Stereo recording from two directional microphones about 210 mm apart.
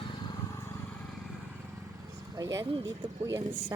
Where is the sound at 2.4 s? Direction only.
15° right (ahead or behind).